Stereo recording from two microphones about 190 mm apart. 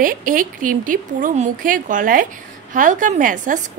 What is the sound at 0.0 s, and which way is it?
A woman's voice, 45° right (ahead or behind).